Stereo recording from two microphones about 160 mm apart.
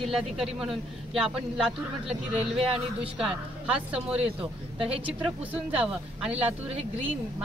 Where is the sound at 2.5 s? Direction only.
35° right (ahead or behind).